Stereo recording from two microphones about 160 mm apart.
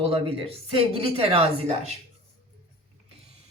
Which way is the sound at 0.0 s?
35° right (ahead or behind).